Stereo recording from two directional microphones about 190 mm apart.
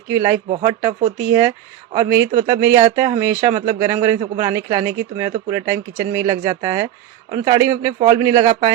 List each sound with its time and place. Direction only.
0.1 s a man's voice: 15° right (ahead or behind)